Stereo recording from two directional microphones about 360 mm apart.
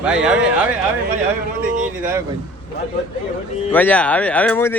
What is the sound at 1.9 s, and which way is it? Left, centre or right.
Speech, centre.